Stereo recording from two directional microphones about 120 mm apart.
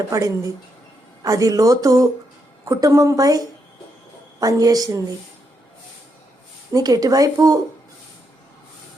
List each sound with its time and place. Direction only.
0.1 s speech: 25° right (ahead or behind)
6.7 s speech: 30° right (ahead or behind)